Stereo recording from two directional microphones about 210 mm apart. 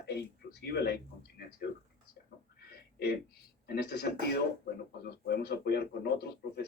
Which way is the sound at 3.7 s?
50° left (ahead or behind).